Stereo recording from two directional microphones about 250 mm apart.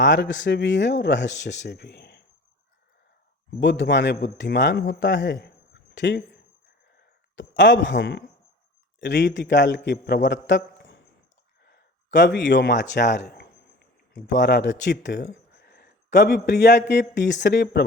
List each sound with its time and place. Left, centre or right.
0.0 s speech: left
3.6 s a man's voice: left
7.3 s a man's voice: left